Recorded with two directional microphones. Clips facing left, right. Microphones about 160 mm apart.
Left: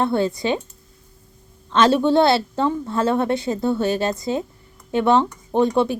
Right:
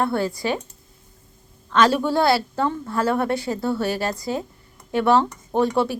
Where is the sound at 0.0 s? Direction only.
20° left (ahead or behind).